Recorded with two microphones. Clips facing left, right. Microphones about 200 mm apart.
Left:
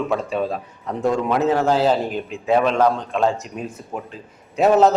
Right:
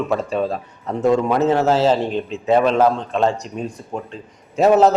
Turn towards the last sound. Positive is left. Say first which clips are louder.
# right 1 dB
turn(degrees=0)  # may be behind; listen again after turning